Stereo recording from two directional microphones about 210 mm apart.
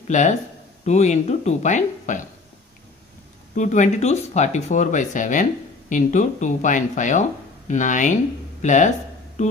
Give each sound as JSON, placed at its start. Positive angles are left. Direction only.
{"t": 0.1, "sound": "speech", "side_deg": 35}
{"t": 3.5, "sound": "speech", "side_deg": 35}
{"t": 9.4, "sound": "a sound", "side_deg": 35}